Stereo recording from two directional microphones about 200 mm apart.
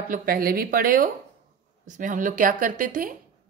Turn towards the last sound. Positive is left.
turn(degrees=-40)  # may be behind; listen again after turning